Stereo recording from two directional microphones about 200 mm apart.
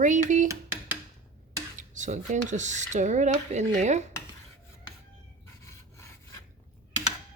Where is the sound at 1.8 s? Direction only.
40° right (ahead or behind).